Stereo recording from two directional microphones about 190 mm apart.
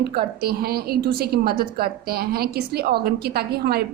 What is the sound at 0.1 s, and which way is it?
A woman's voice, 55° right (ahead or behind).